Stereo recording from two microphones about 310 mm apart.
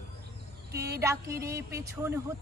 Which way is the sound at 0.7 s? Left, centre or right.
Centre.